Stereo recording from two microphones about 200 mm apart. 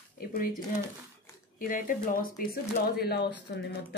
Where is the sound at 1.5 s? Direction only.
45° left (ahead or behind).